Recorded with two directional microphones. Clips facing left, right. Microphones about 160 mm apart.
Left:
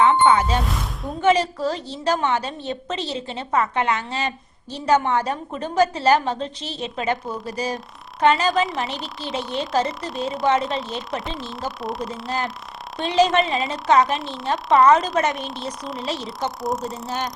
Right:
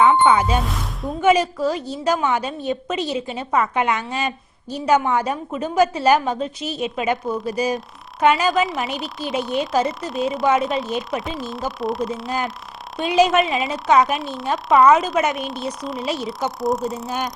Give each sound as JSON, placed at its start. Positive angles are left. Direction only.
{"t": 0.3, "sound": "a woman's voice", "side_deg": -15}
{"t": 0.6, "sound": "speech", "side_deg": 0}
{"t": 1.2, "sound": "a woman's voice", "side_deg": -10}
{"t": 17.1, "sound": "speech", "side_deg": -20}